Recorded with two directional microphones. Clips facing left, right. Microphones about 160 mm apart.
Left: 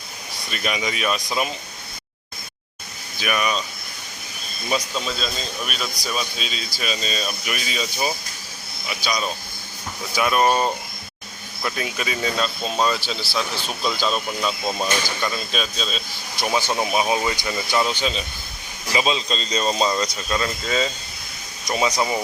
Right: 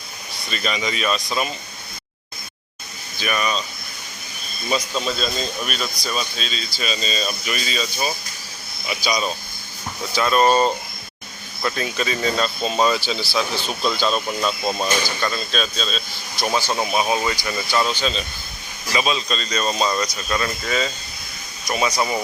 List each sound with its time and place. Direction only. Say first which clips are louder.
0.5 s speech: right 1 dB; 10° left (ahead or behind)
3.2 s speech: even; 5° left (ahead or behind)
4.7 s speech: right 2 dB; centre (ahead or behind)
10.2 s speech: right 2 dB; 10° left (ahead or behind)
15.2 s speech: right 2 dB; 10° left (ahead or behind)
16.6 s speech: even; 20° left (ahead or behind)